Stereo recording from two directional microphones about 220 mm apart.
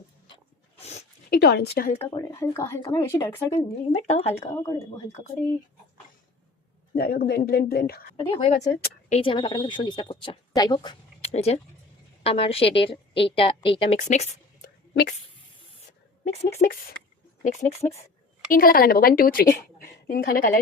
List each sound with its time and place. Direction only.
1.3 s speech: 45° left (ahead or behind)
2.0 s speech: 15° left (ahead or behind)
3.5 s speech: 30° left (ahead or behind)
6.9 s speech: 45° left (ahead or behind)
8.1 s speech: 25° left (ahead or behind)
15.9 s a sound: 30° left (ahead or behind)
16.6 s speech: 40° left (ahead or behind)
18.5 s speech: 40° left (ahead or behind)